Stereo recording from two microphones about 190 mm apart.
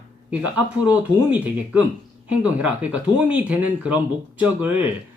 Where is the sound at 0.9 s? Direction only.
10° right (ahead or behind).